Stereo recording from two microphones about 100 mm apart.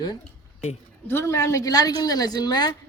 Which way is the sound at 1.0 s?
25° left (ahead or behind).